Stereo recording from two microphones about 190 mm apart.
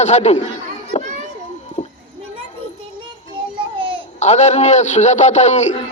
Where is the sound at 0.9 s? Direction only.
35° left (ahead or behind).